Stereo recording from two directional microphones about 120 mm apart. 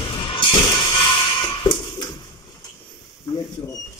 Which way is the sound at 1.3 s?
45° left (ahead or behind).